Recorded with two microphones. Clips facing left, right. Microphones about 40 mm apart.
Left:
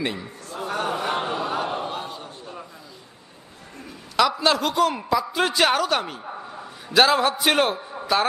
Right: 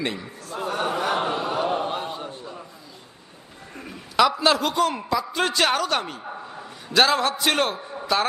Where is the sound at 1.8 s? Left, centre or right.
Right.